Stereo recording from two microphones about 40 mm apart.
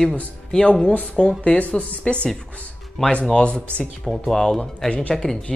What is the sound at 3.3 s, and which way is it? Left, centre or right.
Speech, left.